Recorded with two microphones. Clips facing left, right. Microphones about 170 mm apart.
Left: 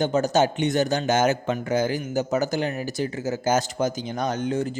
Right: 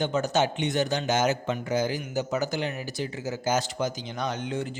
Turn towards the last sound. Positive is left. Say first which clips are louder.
# left 5 dB
turn(degrees=45)  # may be behind; listen again after turning